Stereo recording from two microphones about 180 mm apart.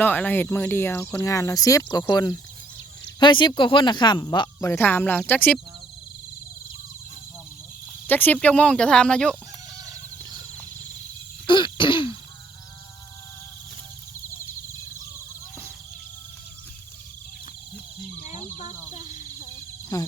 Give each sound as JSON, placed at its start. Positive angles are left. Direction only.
{"t": 0.0, "sound": "speech", "side_deg": 10}
{"t": 8.0, "sound": "speech", "side_deg": 10}
{"t": 11.4, "sound": "throat clearing", "side_deg": 25}
{"t": 19.9, "sound": "wild animals", "side_deg": 20}